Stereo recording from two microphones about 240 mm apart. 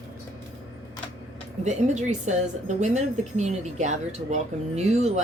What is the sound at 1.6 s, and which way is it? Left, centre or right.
A woman's voice, right.